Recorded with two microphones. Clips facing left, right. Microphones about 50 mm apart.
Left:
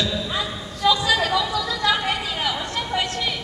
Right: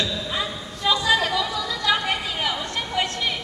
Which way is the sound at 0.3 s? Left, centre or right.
Centre.